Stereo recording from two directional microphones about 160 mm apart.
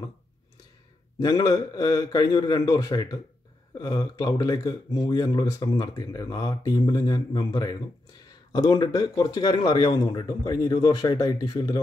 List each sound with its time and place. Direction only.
1.2 s speech: 20° left (ahead or behind)